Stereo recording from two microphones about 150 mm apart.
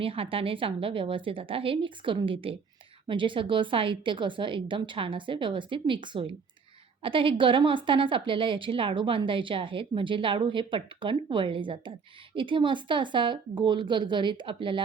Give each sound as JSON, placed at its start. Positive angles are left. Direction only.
{"t": 0.0, "sound": "a woman's voice", "side_deg": -40}